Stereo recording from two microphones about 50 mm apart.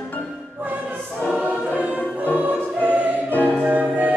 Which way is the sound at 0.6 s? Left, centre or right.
Right.